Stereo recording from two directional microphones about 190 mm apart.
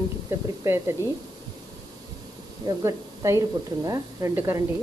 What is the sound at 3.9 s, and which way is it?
Frying, 15° right (ahead or behind).